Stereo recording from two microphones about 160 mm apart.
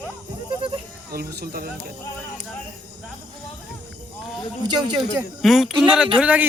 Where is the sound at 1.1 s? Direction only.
75° right (ahead or behind).